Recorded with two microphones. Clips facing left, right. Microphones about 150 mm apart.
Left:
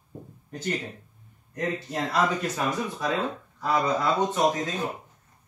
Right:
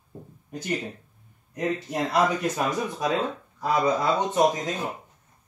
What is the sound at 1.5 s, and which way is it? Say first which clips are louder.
Speech: right 2 dB; 20° right (ahead or behind).